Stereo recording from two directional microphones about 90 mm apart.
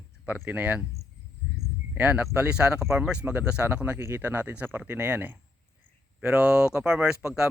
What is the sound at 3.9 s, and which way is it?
Speech, 30° right (ahead or behind).